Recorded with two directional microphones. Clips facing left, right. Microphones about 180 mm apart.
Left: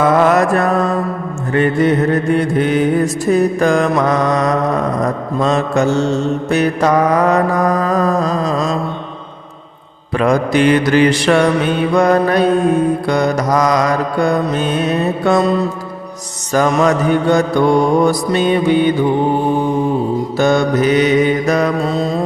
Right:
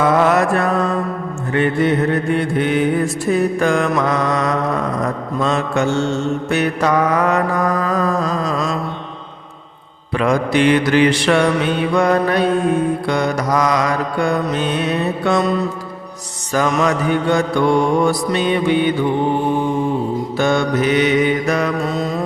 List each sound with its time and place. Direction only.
0.0 s mantra: 50° left (ahead or behind); by 8.8 s 30° left (ahead or behind)
10.2 s mantra: 40° left (ahead or behind)
15.4 s mantra: 30° left (ahead or behind)
20.4 s mantra: 40° left (ahead or behind)